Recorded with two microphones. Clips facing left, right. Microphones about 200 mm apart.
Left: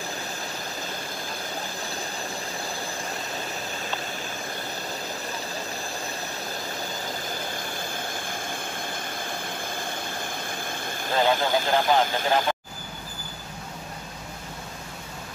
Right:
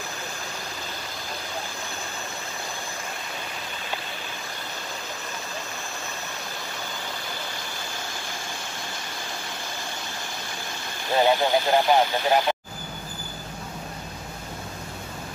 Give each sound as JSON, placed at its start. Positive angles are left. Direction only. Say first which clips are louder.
{"t": 11.1, "sound": "speech", "louder": "right 2 dB", "side_deg": -15}